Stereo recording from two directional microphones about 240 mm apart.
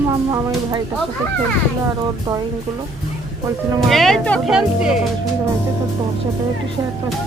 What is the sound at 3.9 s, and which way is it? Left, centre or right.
Speech, centre.